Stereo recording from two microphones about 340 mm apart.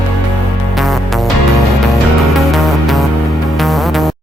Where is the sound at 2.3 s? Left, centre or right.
Centre.